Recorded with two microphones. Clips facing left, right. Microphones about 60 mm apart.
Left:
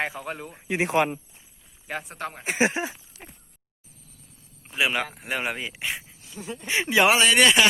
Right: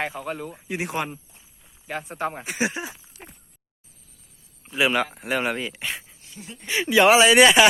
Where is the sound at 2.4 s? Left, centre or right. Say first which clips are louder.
Left 3 dB; left.